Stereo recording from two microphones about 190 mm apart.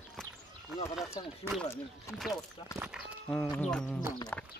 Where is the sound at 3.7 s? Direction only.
5° left (ahead or behind).